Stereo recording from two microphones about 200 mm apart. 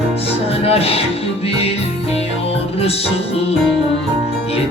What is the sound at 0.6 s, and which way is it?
Speech, 30° left (ahead or behind).